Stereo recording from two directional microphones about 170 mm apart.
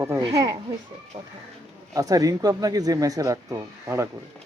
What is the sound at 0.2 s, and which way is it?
Speech, 20° right (ahead or behind).